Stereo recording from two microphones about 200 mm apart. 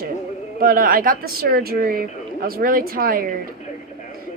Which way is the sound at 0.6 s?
45° right (ahead or behind).